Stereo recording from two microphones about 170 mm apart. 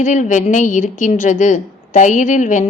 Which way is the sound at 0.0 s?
50° left (ahead or behind).